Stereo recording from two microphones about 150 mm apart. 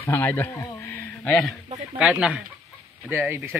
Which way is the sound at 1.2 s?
Centre (ahead or behind).